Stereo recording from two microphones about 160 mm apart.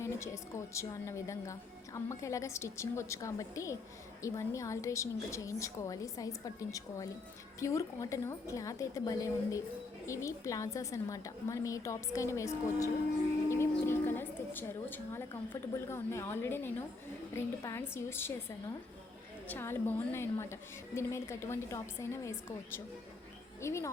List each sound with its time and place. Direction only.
0.0 s a woman's voice: 15° left (ahead or behind)
13.5 s a sound: 15° left (ahead or behind)
15.9 s a woman's voice: 15° left (ahead or behind)
19.5 s a woman's voice: 15° left (ahead or behind)
23.6 s a woman's voice: 15° left (ahead or behind)